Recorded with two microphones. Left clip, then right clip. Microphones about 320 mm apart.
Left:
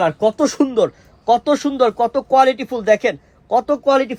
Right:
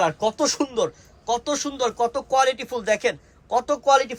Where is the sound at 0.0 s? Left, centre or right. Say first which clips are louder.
Left 5 dB; left.